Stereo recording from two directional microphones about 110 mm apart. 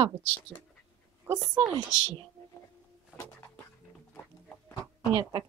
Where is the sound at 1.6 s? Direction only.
50° right (ahead or behind).